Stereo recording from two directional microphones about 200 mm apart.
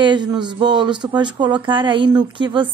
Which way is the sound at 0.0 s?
25° right (ahead or behind).